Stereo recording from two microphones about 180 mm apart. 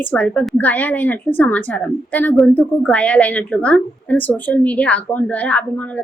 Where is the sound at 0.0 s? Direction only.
10° left (ahead or behind).